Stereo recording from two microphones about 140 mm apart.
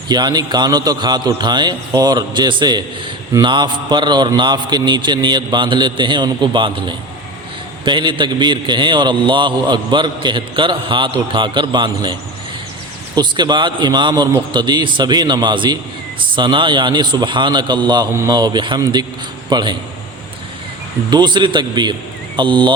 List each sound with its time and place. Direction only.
0.1 s a man's voice: 30° right (ahead or behind)
13.1 s a man's voice: 30° right (ahead or behind)
21.1 s a man's voice: 30° right (ahead or behind)